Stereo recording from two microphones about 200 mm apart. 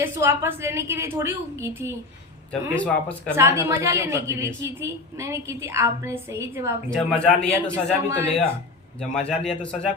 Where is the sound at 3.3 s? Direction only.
15° right (ahead or behind).